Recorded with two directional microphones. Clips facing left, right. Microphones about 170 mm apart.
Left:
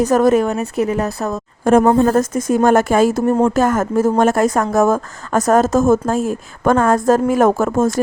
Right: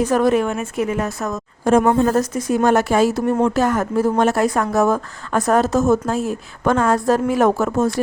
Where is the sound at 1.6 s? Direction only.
55° left (ahead or behind).